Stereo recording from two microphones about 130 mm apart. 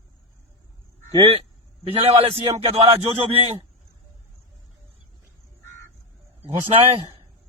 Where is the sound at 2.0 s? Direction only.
55° right (ahead or behind).